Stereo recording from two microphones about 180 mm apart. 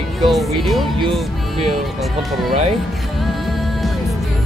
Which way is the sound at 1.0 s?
35° right (ahead or behind).